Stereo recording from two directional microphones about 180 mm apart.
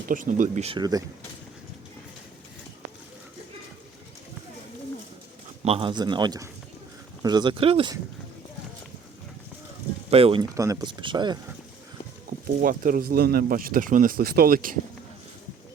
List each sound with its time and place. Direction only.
0.1 s speech: 50° right (ahead or behind)
0.8 s speech: 20° right (ahead or behind)
5.6 s speech: 30° right (ahead or behind)
10.1 s speech: 30° right (ahead or behind)
10.5 s speech: 20° right (ahead or behind)
12.6 s speech: 50° right (ahead or behind)